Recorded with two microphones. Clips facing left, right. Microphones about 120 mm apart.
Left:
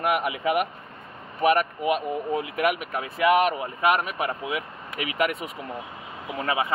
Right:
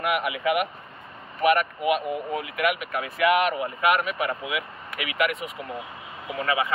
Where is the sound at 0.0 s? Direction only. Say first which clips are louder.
Left 1 dB; 40° left (ahead or behind).